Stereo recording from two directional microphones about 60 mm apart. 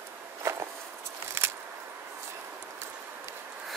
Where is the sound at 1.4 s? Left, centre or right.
Right.